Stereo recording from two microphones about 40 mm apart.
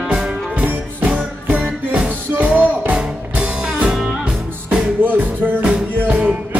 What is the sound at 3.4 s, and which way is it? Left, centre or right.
Music, centre.